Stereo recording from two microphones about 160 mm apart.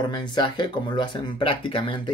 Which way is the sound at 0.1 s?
30° left (ahead or behind).